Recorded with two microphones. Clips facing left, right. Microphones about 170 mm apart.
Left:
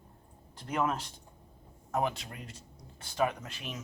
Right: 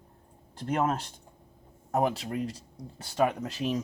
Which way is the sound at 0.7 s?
45° right (ahead or behind).